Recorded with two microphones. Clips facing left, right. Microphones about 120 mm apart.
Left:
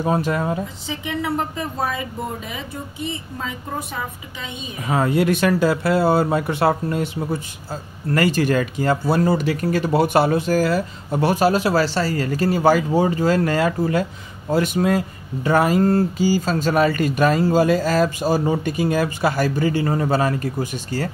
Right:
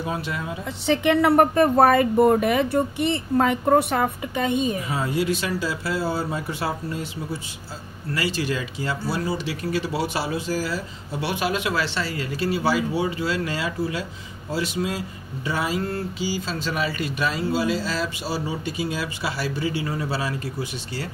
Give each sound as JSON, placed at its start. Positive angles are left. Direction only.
{"t": 0.0, "sound": "speech", "side_deg": 45}
{"t": 0.8, "sound": "speech", "side_deg": -65}
{"t": 4.8, "sound": "speech", "side_deg": 55}